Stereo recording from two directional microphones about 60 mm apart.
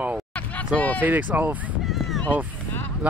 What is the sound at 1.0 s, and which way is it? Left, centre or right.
Speech, right.